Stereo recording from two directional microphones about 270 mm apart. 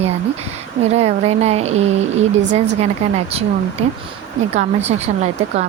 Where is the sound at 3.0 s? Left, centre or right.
Right.